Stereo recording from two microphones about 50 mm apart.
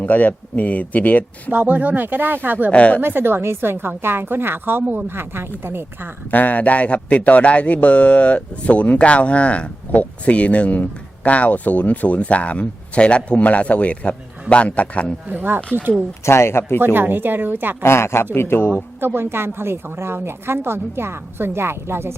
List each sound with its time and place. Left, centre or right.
0.0 s speech: left
1.5 s speech: right
2.6 s speech: left
3.0 s a woman's voice: right
6.3 s speech: left
15.3 s a woman's voice: right
16.2 s speech: left
16.8 s a woman's voice: right
17.8 s a man's voice: left
18.9 s a woman's voice: right